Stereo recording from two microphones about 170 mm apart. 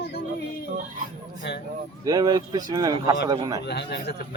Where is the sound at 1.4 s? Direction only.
90° left.